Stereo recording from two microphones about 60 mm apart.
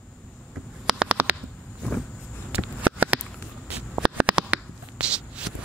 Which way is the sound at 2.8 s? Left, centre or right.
Right.